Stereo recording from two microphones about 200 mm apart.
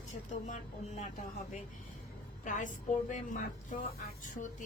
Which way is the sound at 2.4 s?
40° left (ahead or behind).